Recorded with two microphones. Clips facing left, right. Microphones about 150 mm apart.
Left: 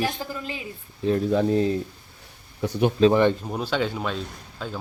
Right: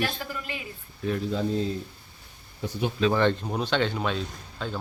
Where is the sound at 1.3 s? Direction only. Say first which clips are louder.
Left 6 dB; 65° left (ahead or behind).